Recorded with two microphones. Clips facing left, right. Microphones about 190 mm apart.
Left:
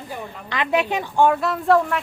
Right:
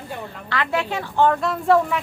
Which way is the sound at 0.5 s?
20° left (ahead or behind).